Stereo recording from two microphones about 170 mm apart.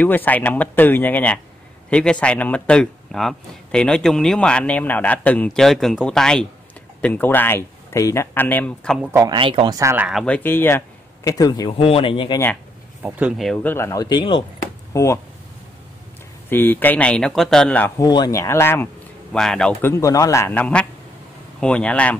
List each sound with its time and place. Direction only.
0.0 s a man's voice: 10° left (ahead or behind)
9.1 s speech: 25° right (ahead or behind)
9.8 s speech: 15° right (ahead or behind)
10.2 s speech: 10° left (ahead or behind)
11.8 s speech: 35° left (ahead or behind)
13.0 s speech: 5° right (ahead or behind); by 15.1 s 20° left (ahead or behind)
16.4 s speech: 10° left (ahead or behind)
17.9 s speech: 20° left (ahead or behind)
19.3 s a man's voice: 5° left (ahead or behind)
19.9 s speech: 20° left (ahead or behind)